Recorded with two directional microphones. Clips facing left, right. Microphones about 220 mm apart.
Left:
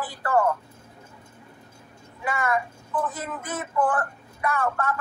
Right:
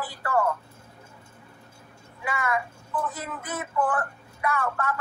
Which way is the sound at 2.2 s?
45° left (ahead or behind).